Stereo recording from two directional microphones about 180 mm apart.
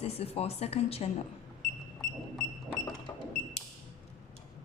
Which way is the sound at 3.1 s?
25° left (ahead or behind).